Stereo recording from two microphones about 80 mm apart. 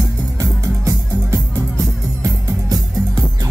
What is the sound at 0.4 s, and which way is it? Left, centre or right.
Music, right.